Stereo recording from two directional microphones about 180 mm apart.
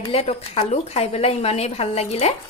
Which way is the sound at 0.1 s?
35° left (ahead or behind).